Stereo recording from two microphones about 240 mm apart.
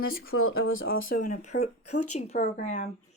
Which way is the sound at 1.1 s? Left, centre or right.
Left.